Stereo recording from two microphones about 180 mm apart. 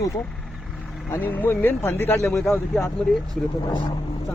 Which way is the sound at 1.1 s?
10° left (ahead or behind).